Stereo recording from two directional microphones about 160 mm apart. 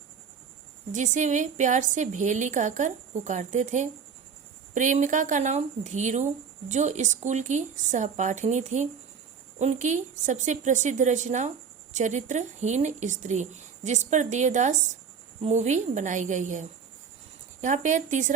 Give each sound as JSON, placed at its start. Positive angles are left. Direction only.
{"t": 0.9, "sound": "speech", "side_deg": -50}